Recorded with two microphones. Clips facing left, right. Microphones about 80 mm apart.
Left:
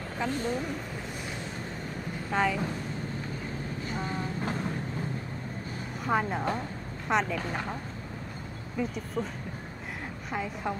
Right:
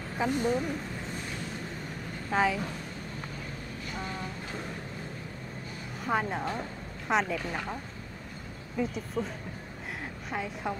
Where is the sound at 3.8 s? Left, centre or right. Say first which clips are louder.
Left 2 dB; left.